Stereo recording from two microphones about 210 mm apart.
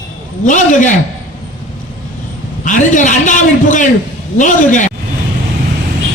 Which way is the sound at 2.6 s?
35° left (ahead or behind).